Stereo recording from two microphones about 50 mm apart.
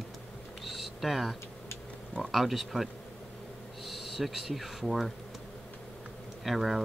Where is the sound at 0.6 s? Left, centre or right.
Centre.